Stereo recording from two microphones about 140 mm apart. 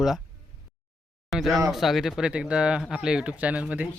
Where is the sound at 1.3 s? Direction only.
Centre (ahead or behind).